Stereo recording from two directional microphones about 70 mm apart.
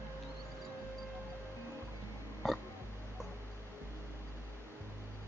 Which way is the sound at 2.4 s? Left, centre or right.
Centre.